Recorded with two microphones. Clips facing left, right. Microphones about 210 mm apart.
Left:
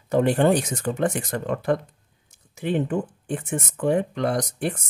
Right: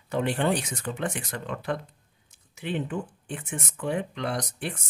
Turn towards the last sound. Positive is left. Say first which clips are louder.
# left 7 dB
turn(degrees=45)  # may be behind; listen again after turning